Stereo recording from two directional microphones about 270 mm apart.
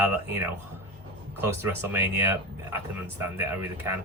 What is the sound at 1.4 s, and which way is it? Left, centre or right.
Speech, centre.